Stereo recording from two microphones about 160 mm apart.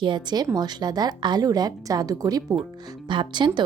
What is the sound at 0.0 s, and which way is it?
A woman's voice, 30° right (ahead or behind).